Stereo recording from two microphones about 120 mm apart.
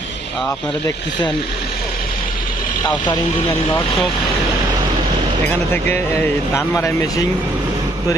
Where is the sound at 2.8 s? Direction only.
40° left (ahead or behind).